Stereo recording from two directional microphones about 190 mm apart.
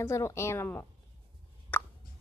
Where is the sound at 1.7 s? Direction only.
10° left (ahead or behind).